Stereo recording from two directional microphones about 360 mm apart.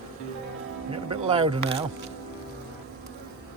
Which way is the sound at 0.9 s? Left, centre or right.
Centre.